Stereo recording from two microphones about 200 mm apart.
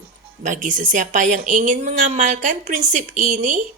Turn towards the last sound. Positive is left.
turn(degrees=-40)  # may be behind; listen again after turning